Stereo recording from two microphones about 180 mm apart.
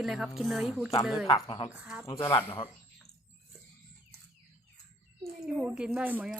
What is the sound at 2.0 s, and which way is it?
Speech, 15° left (ahead or behind).